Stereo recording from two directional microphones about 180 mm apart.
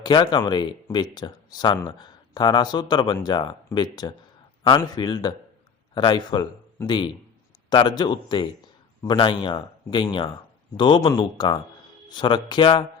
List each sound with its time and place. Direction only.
0.0 s speech: 25° left (ahead or behind)